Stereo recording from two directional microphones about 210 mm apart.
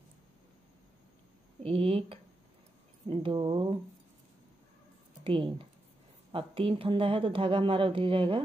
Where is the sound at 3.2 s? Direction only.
20° right (ahead or behind).